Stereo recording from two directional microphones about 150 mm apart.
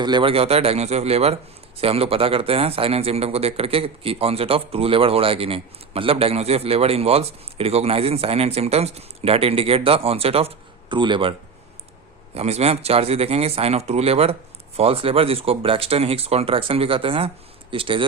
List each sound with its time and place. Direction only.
0.0 s speech: 30° right (ahead or behind)